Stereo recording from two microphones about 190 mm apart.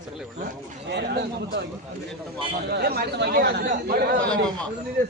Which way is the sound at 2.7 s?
55° right (ahead or behind).